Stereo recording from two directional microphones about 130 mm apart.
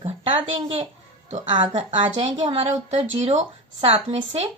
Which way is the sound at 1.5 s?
40° right (ahead or behind).